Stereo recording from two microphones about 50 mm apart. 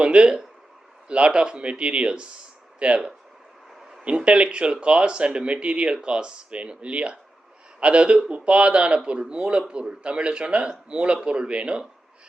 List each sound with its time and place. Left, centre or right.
0.0 s speech: right